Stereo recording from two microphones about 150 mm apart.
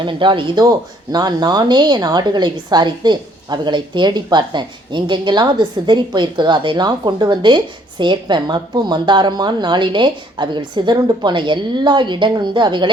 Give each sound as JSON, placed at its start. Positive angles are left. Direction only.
{"t": 0.0, "sound": "speech", "side_deg": -35}